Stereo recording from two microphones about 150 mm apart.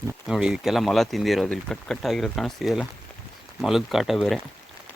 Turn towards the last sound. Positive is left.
turn(degrees=0)  # may be behind; listen again after turning